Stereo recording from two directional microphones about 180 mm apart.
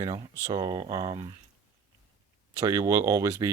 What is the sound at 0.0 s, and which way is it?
Speech, 25° right (ahead or behind).